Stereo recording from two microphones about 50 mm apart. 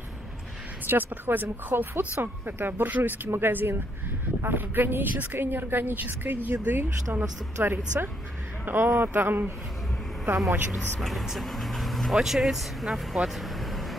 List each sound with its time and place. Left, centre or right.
0.8 s a woman's voice: right
3.3 s a woman's voice: right
7.6 s a woman's voice: right
10.3 s speech: right
11.0 s speech: centre